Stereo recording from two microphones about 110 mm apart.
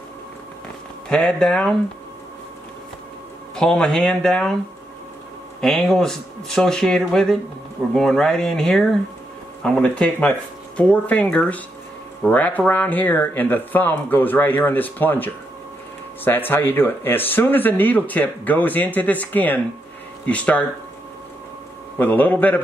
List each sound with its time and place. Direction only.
1.0 s speech: 5° left (ahead or behind)
3.5 s speech: 5° left (ahead or behind)
5.6 s speech: centre (ahead or behind)
21.9 s speech: 15° left (ahead or behind)